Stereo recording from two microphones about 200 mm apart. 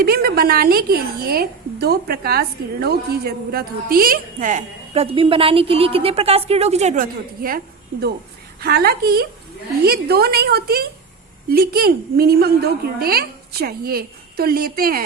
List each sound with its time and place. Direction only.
0.0 s a woman's voice: 50° right (ahead or behind)
8.6 s a woman's voice: 50° right (ahead or behind)